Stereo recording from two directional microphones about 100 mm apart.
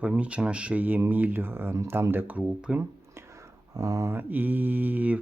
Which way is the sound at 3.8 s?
35° right (ahead or behind).